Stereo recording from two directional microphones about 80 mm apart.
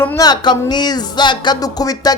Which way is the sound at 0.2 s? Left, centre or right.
Left.